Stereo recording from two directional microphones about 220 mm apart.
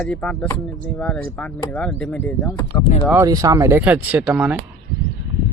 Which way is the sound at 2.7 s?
25° left (ahead or behind).